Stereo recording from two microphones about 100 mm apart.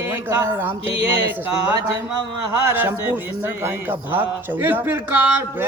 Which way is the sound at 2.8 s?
20° right (ahead or behind).